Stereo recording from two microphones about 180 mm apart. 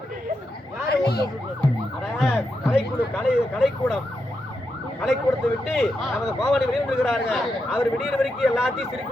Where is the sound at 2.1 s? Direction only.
Centre (ahead or behind).